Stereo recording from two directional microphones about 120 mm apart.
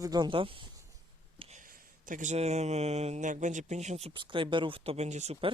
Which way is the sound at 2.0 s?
90° right.